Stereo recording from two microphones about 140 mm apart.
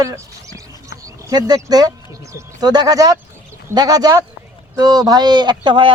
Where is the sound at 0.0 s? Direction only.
25° right (ahead or behind).